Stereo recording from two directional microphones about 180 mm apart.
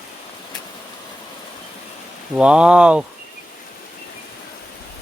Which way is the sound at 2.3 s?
5° right (ahead or behind).